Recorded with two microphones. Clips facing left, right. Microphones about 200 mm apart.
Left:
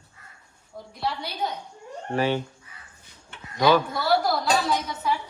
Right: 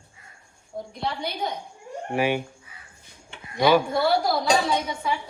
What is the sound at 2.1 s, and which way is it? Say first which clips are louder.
Speech: even; 10° right (ahead or behind).